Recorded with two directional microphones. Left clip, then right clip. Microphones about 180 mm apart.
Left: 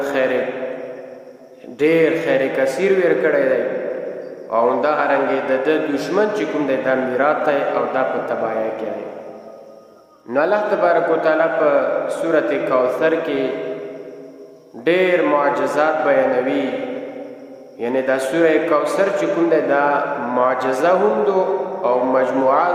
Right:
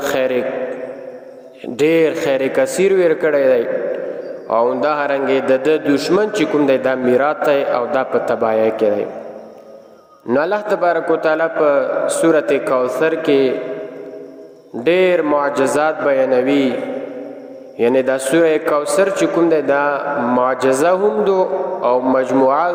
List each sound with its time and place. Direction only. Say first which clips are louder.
0.0 s a sound: right 1 dB; 45° right (ahead or behind)
1.8 s a man's voice: right 1 dB; 45° right (ahead or behind)
10.2 s a man's voice: right 1 dB; 45° right (ahead or behind)
14.8 s a man's voice: right 2 dB; 45° right (ahead or behind)
17.7 s a man's voice: right 4 dB; 45° right (ahead or behind)